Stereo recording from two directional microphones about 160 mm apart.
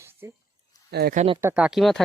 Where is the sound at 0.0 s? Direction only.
15° right (ahead or behind).